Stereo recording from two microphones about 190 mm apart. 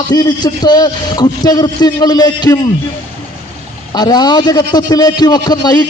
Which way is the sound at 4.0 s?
20° left (ahead or behind).